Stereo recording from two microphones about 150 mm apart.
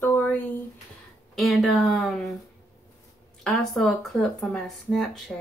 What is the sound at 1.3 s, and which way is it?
Speech, centre (ahead or behind).